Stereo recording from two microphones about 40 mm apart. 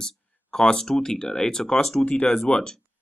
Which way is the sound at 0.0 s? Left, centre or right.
Centre.